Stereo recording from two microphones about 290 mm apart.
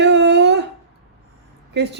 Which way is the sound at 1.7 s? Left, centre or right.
Right.